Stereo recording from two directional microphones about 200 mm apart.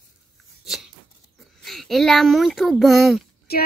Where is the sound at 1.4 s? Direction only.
Centre (ahead or behind).